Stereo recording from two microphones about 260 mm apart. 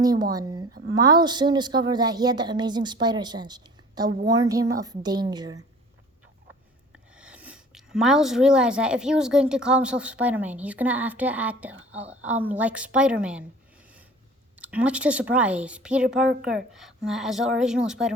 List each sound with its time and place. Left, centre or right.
0.0 s a woman's voice: centre
7.2 s speech: centre
14.6 s speech: centre